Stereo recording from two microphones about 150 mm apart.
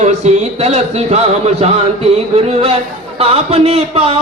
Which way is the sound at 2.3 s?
40° right (ahead or behind).